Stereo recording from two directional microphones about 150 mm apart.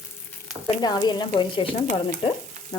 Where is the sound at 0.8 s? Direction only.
25° left (ahead or behind).